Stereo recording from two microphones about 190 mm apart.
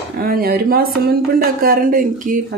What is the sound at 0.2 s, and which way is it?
Speech, 50° right (ahead or behind).